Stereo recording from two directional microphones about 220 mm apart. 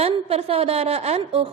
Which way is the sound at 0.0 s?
25° right (ahead or behind).